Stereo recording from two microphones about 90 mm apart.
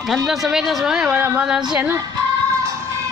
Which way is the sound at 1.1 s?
25° right (ahead or behind).